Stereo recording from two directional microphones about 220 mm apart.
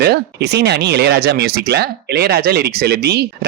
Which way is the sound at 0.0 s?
50° right (ahead or behind).